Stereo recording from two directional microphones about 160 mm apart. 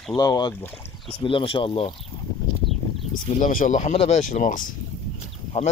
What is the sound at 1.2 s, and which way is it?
Speech, 35° left (ahead or behind).